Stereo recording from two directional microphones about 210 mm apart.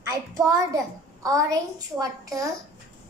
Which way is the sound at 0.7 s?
15° right (ahead or behind).